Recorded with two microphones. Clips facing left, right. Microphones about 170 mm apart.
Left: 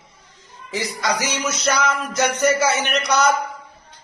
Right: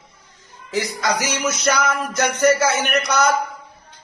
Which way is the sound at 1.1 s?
15° right (ahead or behind).